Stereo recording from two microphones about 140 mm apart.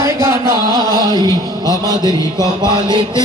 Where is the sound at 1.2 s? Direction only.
25° left (ahead or behind).